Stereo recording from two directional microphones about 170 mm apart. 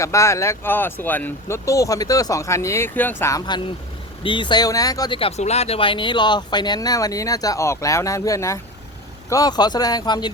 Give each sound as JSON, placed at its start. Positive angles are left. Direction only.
{"t": 0.0, "sound": "speech", "side_deg": 15}
{"t": 5.4, "sound": "speech", "side_deg": 40}